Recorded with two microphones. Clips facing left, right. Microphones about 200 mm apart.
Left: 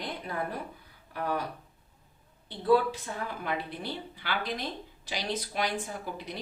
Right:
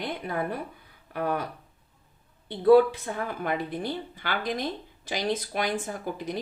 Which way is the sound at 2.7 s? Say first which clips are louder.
Right 7 dB; 50° right (ahead or behind).